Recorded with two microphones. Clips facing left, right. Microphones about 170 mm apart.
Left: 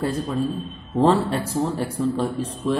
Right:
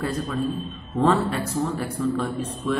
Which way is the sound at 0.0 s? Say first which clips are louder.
Left 2 dB; 30° left (ahead or behind).